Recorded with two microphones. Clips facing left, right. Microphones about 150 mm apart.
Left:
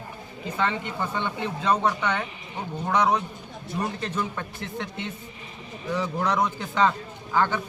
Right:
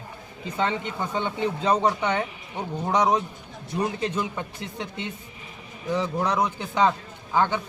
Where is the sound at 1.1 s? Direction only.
15° right (ahead or behind).